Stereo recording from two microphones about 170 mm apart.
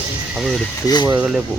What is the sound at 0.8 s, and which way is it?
Speech, 25° left (ahead or behind).